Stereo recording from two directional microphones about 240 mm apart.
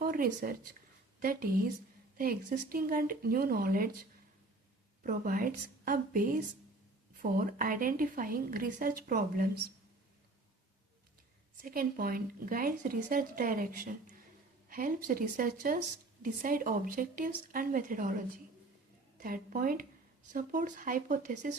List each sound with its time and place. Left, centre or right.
0.0 s a woman's voice: right
5.0 s a woman's voice: right
11.6 s a woman's voice: right
19.2 s a woman's voice: right